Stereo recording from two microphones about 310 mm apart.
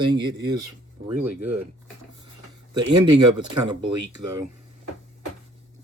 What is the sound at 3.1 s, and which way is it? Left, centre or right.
Speech, right.